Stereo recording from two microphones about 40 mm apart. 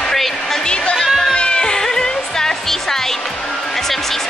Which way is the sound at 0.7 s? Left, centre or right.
Left.